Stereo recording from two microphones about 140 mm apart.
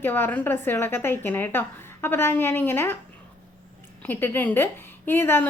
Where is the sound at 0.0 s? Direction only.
15° left (ahead or behind).